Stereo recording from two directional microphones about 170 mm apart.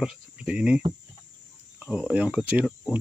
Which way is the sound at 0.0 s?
5° right (ahead or behind).